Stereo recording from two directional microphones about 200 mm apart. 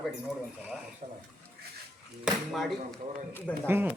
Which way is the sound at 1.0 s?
35° right (ahead or behind).